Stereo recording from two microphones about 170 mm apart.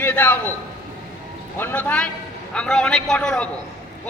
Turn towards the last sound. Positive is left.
turn(degrees=5)  # may be behind; listen again after turning